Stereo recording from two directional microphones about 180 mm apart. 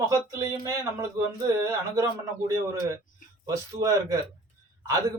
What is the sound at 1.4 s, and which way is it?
Speech, 20° right (ahead or behind).